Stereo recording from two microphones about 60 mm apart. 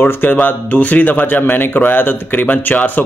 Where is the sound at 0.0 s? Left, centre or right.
Left.